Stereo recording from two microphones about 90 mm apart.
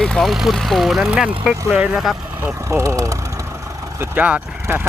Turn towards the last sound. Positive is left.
turn(degrees=-20)  # may be behind; listen again after turning